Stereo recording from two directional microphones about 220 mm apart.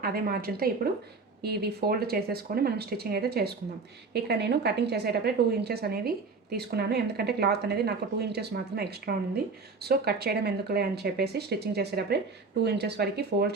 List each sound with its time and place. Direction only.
0.0 s a woman's voice: 40° right (ahead or behind)